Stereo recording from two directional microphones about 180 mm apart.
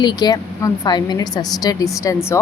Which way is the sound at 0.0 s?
25° left (ahead or behind).